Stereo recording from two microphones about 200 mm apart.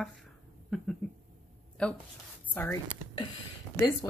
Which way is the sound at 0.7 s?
Centre (ahead or behind).